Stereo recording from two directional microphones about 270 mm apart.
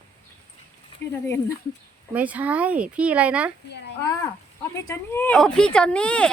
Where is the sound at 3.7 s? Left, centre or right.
Left.